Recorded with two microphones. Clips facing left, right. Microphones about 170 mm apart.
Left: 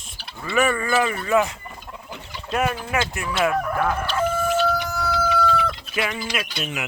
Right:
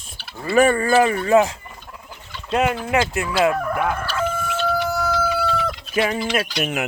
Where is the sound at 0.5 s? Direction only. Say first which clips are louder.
Right 5 dB; 35° right (ahead or behind).